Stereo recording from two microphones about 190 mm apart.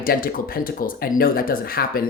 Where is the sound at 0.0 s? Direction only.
50° left (ahead or behind).